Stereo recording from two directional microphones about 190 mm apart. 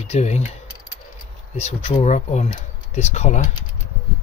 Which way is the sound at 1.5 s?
35° left (ahead or behind).